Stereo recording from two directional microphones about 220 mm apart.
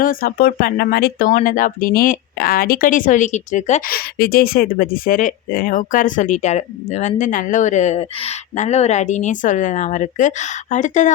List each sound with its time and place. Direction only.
0.0 s speech: 40° left (ahead or behind)